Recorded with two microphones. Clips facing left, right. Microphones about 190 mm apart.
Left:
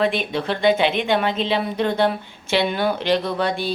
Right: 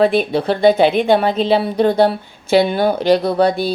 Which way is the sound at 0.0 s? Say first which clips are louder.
Right 7 dB; 35° right (ahead or behind).